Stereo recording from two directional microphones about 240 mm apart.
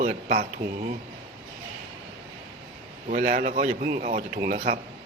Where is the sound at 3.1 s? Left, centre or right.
Right.